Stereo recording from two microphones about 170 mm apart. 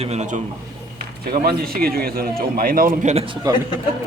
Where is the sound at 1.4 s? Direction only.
60° right (ahead or behind); by 3.2 s 45° right (ahead or behind).